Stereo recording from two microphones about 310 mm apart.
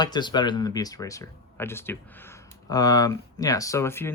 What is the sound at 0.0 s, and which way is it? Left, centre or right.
Speech, centre.